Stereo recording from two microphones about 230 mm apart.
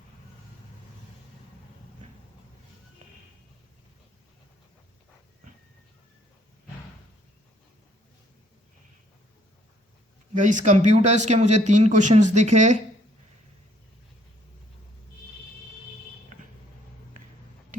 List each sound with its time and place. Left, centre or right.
10.3 s speech: right